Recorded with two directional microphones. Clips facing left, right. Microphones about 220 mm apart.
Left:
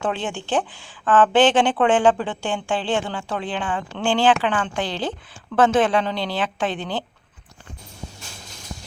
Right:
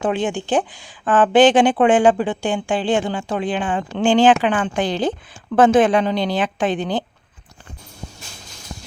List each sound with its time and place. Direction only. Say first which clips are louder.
0.0 s speech: right 5 dB; 15° right (ahead or behind)